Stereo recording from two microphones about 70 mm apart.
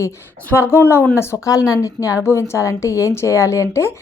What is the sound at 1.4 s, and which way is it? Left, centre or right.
A woman's voice, left.